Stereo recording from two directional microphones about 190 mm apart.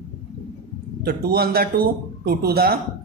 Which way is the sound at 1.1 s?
55° right (ahead or behind).